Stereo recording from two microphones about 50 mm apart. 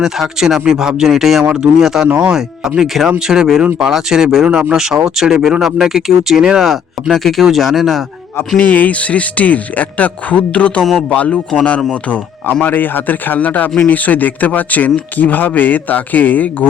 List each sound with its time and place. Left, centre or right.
0.0 s speech: centre
2.0 s speech: right
2.3 s speech: centre
7.1 s speech: centre
8.5 s speech: left
12.6 s speech: left